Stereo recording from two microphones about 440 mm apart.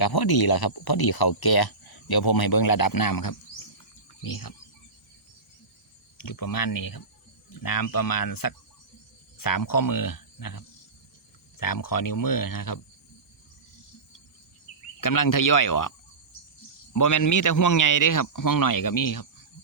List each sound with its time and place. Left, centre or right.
0.0 s speech: left
6.1 s speech: left
15.0 s speech: left